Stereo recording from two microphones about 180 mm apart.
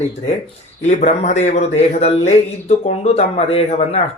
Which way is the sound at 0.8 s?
40° left (ahead or behind).